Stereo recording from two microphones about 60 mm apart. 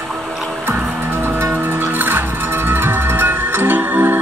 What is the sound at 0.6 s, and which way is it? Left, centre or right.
Music, right.